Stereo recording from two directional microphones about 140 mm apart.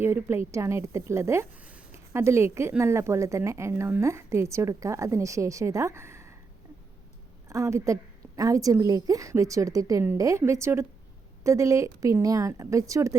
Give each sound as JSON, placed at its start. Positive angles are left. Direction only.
{"t": 0.0, "sound": "a woman's voice", "side_deg": -15}
{"t": 7.4, "sound": "a woman's voice", "side_deg": -20}